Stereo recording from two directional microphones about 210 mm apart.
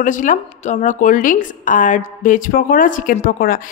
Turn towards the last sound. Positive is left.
turn(degrees=40)  # may be behind; listen again after turning